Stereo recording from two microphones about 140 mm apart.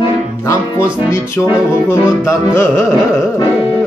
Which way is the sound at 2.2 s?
20° left (ahead or behind).